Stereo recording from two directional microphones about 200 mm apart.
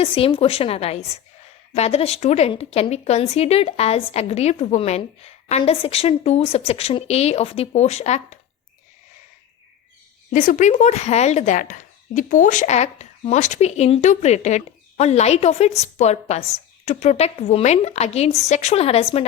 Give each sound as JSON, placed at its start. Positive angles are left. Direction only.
{"t": 0.0, "sound": "a woman's voice", "side_deg": 25}
{"t": 10.3, "sound": "speech", "side_deg": 40}